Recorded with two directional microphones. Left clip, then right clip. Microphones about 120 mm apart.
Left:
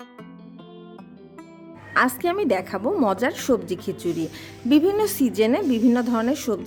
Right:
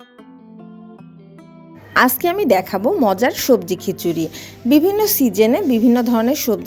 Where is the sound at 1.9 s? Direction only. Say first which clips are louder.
Right 6 dB; 15° right (ahead or behind).